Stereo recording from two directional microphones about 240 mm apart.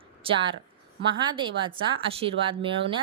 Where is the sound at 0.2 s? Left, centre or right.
Right.